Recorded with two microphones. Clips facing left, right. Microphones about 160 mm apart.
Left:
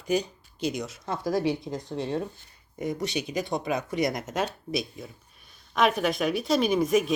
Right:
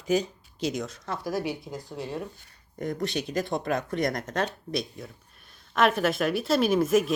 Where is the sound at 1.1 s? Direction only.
20° left (ahead or behind).